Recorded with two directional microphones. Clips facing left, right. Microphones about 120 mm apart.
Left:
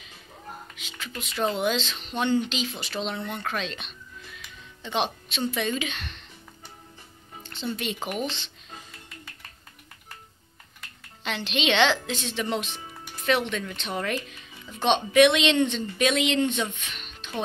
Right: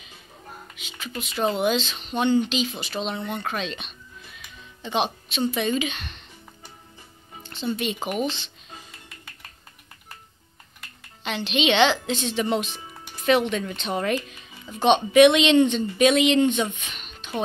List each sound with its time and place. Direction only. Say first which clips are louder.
0.7 s music: right 8 dB; 5° right (ahead or behind)
1.3 s speech: right 3 dB; 10° right (ahead or behind)
7.4 s speech: right 4 dB; 10° right (ahead or behind)
11.2 s speech: right 3 dB; 5° right (ahead or behind)
12.1 s speech: right 5 dB; 20° right (ahead or behind)